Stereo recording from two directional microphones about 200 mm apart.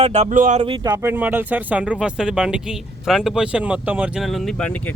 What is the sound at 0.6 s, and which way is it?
Speech, 20° right (ahead or behind).